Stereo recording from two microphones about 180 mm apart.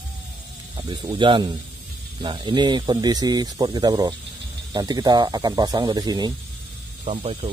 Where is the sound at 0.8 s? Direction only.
25° right (ahead or behind).